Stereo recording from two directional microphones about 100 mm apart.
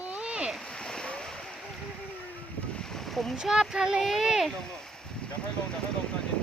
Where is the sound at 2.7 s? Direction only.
5° left (ahead or behind).